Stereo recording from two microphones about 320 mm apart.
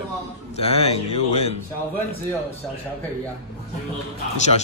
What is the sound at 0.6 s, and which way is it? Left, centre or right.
Speech, centre.